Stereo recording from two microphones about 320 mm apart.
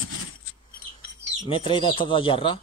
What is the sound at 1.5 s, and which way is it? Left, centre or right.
Speech, centre.